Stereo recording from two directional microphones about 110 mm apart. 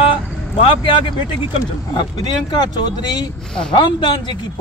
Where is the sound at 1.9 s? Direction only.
40° left (ahead or behind).